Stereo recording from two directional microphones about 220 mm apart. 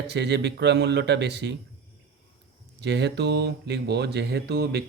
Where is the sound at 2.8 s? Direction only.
50° right (ahead or behind).